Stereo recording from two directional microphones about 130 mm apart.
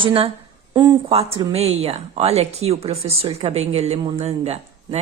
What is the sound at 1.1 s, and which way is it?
A woman's voice, 50° right (ahead or behind).